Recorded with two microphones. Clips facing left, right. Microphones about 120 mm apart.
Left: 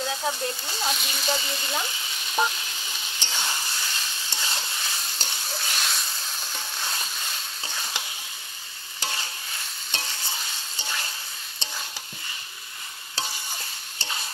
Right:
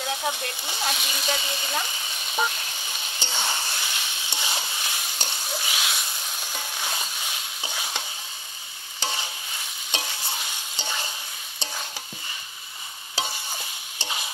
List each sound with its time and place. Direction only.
0.1 s speech: 15° right (ahead or behind)
0.8 s speech: centre (ahead or behind)
3.2 s stir: 15° right (ahead or behind)
9.8 s stir: 10° right (ahead or behind)
10.8 s frying: 20° right (ahead or behind)
13.1 s stir: 15° right (ahead or behind)